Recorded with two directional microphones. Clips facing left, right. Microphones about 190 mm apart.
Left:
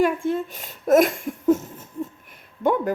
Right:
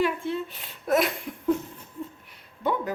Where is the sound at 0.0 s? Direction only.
45° left (ahead or behind).